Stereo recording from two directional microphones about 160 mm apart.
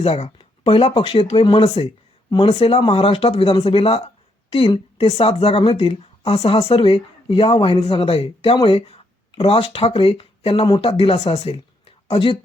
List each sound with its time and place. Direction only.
0.0 s speech: 40° left (ahead or behind)